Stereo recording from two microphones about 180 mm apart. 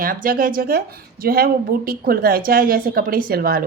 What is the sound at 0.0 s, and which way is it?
A woman's voice, 50° right (ahead or behind).